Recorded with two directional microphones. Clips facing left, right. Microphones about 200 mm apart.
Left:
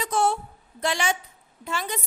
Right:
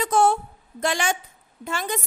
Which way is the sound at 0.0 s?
50° right (ahead or behind).